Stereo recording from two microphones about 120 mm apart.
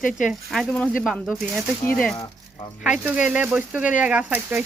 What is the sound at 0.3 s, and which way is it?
Speech, 5° right (ahead or behind).